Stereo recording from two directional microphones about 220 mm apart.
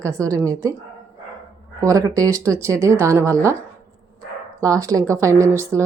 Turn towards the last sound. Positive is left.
turn(degrees=-10)  # may be behind; listen again after turning